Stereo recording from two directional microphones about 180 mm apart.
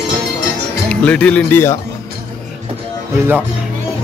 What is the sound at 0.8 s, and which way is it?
Speech, 5° left (ahead or behind).